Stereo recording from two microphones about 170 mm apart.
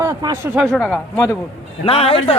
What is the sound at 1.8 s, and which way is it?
Speech, 35° left (ahead or behind).